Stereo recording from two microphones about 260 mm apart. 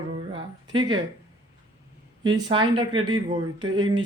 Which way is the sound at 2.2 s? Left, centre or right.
Centre.